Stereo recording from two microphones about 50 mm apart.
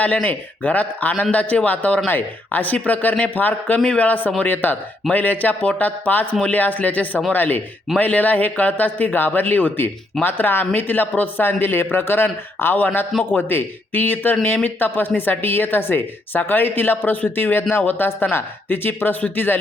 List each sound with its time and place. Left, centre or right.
0.0 s a man's voice: left